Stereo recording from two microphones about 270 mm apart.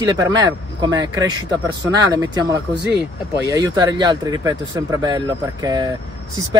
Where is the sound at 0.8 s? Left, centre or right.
Centre.